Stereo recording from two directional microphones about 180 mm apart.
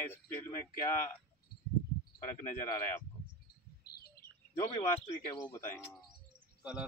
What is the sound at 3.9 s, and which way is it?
Bird, 60° left (ahead or behind).